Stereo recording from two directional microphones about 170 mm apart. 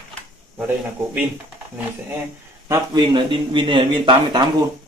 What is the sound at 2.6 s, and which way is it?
Speech, 20° right (ahead or behind).